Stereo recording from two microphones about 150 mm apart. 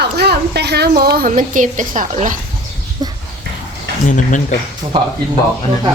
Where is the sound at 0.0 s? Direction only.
90° right.